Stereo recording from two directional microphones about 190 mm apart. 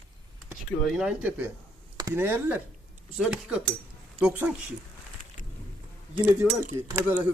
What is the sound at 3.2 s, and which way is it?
Chopping, 5° right (ahead or behind).